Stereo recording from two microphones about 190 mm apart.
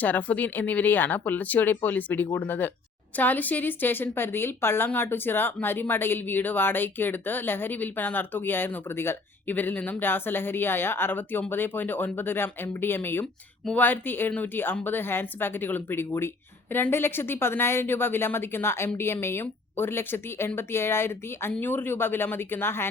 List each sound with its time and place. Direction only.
0.0 s a woman's voice: 10° left (ahead or behind)